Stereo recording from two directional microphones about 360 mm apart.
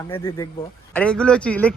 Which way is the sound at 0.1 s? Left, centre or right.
Centre.